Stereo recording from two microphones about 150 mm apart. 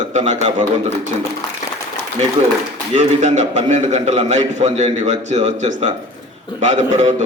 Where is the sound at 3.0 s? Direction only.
50° right (ahead or behind).